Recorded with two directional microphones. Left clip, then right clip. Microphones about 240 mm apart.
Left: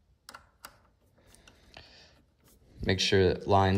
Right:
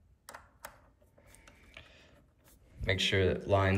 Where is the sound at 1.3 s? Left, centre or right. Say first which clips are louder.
Left 1 dB; centre.